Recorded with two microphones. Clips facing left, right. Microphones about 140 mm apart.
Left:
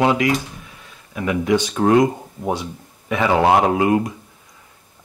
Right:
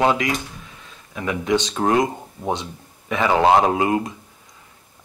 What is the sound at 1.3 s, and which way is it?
Speech, 20° right (ahead or behind).